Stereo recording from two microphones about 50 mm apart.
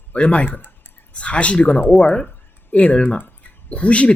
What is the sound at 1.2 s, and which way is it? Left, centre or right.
Speech, left.